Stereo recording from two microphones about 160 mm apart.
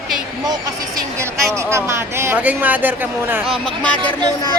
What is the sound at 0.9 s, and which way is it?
Speech, 15° right (ahead or behind).